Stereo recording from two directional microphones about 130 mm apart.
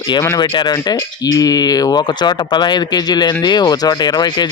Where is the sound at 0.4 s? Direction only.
35° left (ahead or behind).